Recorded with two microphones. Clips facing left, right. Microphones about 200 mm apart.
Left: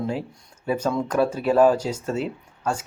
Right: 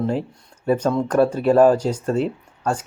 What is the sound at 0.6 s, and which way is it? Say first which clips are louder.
Speech: right 5 dB; 10° left (ahead or behind).